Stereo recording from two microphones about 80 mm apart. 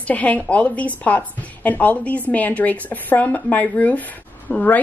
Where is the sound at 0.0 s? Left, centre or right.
Centre.